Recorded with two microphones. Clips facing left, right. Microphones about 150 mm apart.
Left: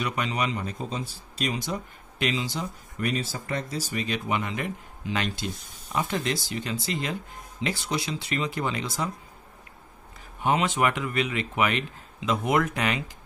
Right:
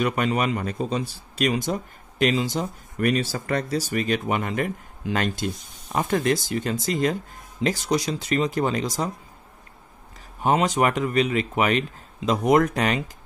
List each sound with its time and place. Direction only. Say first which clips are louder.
0.0 s speech: right 6 dB; 50° right (ahead or behind)
1.7 s speech: right 5 dB; 45° right (ahead or behind)
10.4 s speech: right 3 dB; 40° right (ahead or behind)